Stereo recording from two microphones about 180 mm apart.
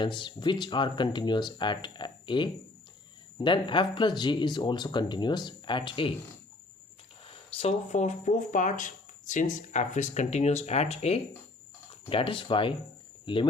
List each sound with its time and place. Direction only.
0.0 s speech: 25° left (ahead or behind)
7.3 s speech: 30° left (ahead or behind)